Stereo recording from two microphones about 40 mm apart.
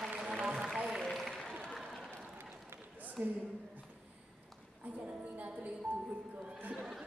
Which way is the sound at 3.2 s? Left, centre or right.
Right.